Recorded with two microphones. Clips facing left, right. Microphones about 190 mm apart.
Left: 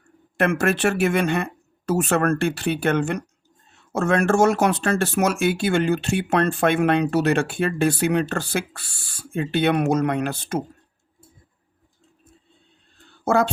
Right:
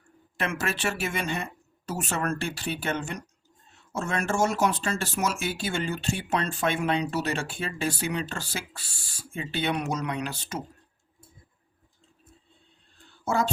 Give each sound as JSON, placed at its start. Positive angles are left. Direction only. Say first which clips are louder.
{"t": 0.3, "sound": "speech", "louder": "left 10 dB", "side_deg": 55}
{"t": 13.2, "sound": "speech", "louder": "left 7 dB", "side_deg": 65}